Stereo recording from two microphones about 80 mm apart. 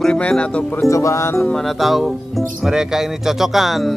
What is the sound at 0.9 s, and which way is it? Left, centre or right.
Speech, left.